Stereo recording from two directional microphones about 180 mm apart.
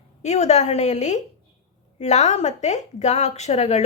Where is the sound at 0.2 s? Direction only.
40° left (ahead or behind).